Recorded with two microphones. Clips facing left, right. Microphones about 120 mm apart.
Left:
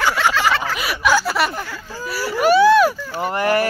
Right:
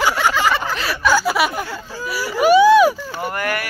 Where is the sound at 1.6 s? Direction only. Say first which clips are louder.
Right 2 dB; 15° right (ahead or behind).